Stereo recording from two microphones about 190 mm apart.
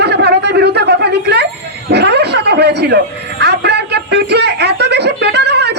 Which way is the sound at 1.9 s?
60° right (ahead or behind).